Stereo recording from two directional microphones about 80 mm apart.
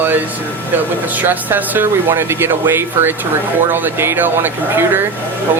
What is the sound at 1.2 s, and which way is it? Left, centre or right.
Speech, right.